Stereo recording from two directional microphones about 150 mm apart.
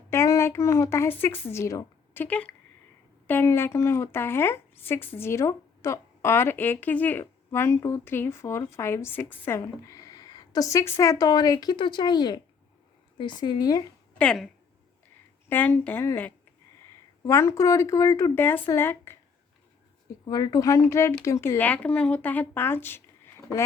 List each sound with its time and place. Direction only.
0.1 s a woman's voice: 20° left (ahead or behind)
14.1 s a woman's voice: 10° left (ahead or behind)
20.2 s a woman's voice: 25° left (ahead or behind)